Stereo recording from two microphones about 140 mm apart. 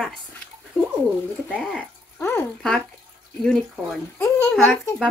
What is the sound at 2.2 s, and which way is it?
Speech, 15° left (ahead or behind).